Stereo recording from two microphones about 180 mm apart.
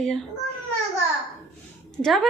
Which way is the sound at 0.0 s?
Centre (ahead or behind).